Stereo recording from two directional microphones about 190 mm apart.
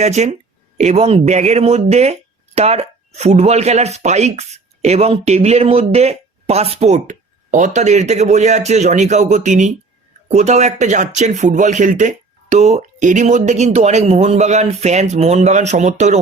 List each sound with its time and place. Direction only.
0.0 s speech: 35° right (ahead or behind)